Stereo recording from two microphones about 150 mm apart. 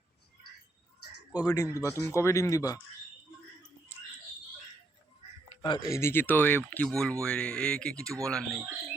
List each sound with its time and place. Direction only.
1.4 s speech: 20° left (ahead or behind)
5.6 s speech: 30° left (ahead or behind)
5.9 s speech: 15° left (ahead or behind)